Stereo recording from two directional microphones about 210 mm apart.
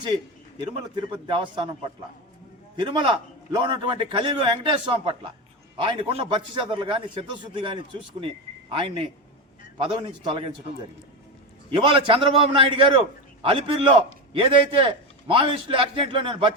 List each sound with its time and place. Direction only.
0.6 s a man's voice: 20° right (ahead or behind)
2.7 s a man's voice: 20° right (ahead or behind)
11.7 s a man's voice: 25° right (ahead or behind)